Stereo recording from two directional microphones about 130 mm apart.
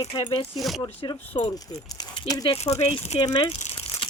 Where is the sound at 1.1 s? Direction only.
35° left (ahead or behind).